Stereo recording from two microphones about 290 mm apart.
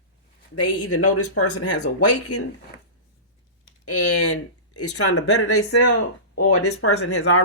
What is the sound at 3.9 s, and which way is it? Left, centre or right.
Speech, left.